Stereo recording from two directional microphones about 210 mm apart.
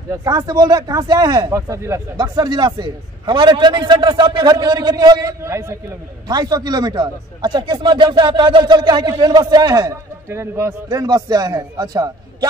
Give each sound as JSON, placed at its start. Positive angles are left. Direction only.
{"t": 0.1, "sound": "a man's voice", "side_deg": -15}